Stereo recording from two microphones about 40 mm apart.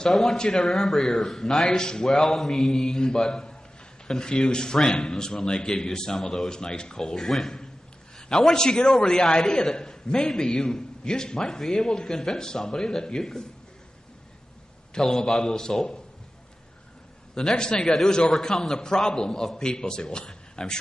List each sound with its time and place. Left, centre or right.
0.1 s a man's voice: centre
2.0 s a man's voice: centre
7.2 s a man's voice: centre
8.2 s a sound: centre
8.5 s a man's voice: centre
15.0 s a man's voice: centre
17.3 s a man's voice: centre